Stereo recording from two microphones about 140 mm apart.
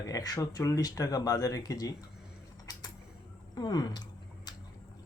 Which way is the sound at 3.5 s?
25° left (ahead or behind).